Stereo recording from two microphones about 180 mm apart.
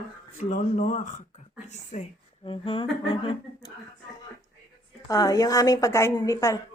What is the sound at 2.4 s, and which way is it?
A woman's voice, 30° left (ahead or behind).